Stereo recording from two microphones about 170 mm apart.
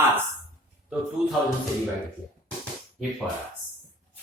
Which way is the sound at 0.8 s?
Centre (ahead or behind).